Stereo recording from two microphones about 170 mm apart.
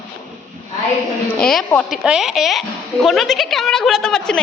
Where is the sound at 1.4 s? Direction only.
5° left (ahead or behind).